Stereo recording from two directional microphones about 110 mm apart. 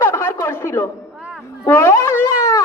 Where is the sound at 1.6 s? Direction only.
20° left (ahead or behind).